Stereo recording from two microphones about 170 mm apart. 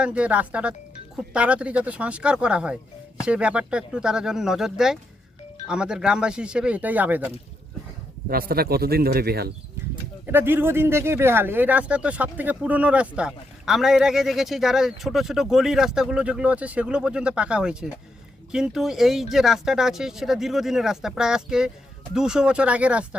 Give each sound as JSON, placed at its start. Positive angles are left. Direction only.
{"t": 0.0, "sound": "speech", "side_deg": -5}
{"t": 8.3, "sound": "speech", "side_deg": -60}
{"t": 10.2, "sound": "speech", "side_deg": -10}